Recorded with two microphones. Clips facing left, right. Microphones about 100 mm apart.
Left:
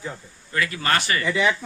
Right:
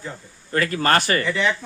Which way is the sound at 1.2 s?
15° left (ahead or behind).